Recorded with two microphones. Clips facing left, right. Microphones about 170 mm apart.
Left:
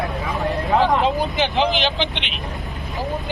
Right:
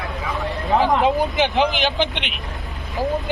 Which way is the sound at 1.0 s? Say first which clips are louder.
Right 2 dB; 15° right (ahead or behind).